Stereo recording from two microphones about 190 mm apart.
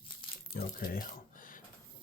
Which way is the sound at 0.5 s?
50° left (ahead or behind).